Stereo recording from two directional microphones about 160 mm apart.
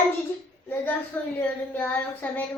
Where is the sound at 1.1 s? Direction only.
10° left (ahead or behind).